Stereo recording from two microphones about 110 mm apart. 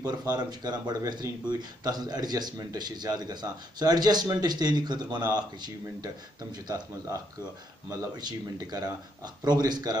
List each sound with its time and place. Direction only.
0.0 s speech: 35° right (ahead or behind)
6.5 s speech: 35° right (ahead or behind)